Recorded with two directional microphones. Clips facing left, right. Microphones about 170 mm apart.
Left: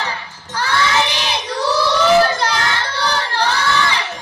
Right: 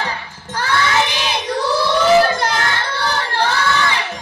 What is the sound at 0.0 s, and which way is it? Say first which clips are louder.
Crowd: right 1 dB; 55° right (ahead or behind).